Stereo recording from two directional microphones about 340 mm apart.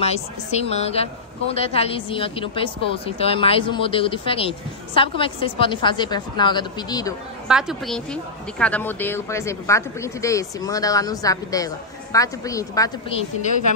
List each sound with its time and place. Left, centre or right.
0.0 s a woman's voice: centre
7.4 s a woman's voice: centre